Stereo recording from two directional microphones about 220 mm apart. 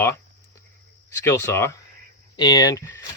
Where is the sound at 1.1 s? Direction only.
10° left (ahead or behind).